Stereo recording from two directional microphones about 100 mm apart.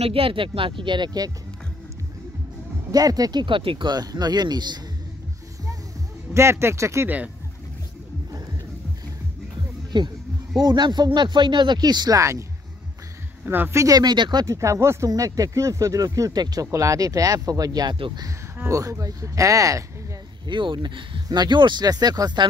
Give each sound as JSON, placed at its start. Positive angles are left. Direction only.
{"t": 0.0, "sound": "speech", "side_deg": -70}
{"t": 2.9, "sound": "speech", "side_deg": -40}
{"t": 6.3, "sound": "speech", "side_deg": -25}
{"t": 9.9, "sound": "speech", "side_deg": -45}
{"t": 12.2, "sound": "speech", "side_deg": -30}
{"t": 13.5, "sound": "speech", "side_deg": -25}
{"t": 13.9, "sound": "speech", "side_deg": -50}
{"t": 14.4, "sound": "speech", "side_deg": -30}
{"t": 20.4, "sound": "speech", "side_deg": -55}